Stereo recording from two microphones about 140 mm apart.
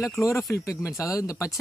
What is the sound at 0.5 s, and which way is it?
Speech, 20° left (ahead or behind).